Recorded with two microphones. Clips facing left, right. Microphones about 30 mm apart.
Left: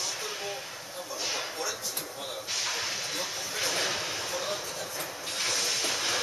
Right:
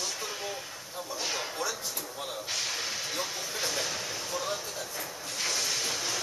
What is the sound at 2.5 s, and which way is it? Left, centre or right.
Vehicle, centre.